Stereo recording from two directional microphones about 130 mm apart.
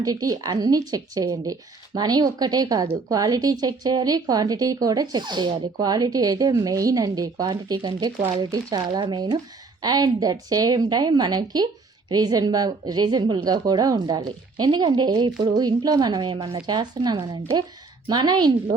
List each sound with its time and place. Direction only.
0.0 s a woman's voice: 30° right (ahead or behind)